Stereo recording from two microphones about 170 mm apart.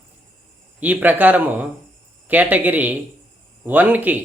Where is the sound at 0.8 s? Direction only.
10° right (ahead or behind).